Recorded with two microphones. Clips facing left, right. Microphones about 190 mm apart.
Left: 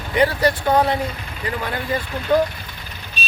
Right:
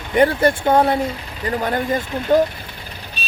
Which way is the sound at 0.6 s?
25° right (ahead or behind).